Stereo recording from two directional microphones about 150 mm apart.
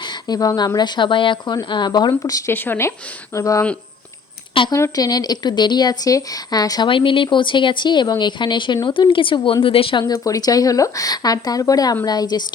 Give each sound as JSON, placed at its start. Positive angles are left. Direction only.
{"t": 0.0, "sound": "speech", "side_deg": 30}
{"t": 4.7, "sound": "speech", "side_deg": 25}